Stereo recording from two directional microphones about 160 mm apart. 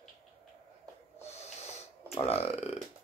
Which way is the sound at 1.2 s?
40° left (ahead or behind).